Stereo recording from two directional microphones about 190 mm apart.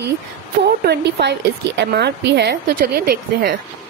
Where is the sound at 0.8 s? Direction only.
60° right (ahead or behind).